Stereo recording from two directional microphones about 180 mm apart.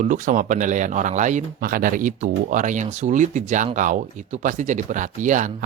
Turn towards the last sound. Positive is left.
turn(degrees=-45)  # may be behind; listen again after turning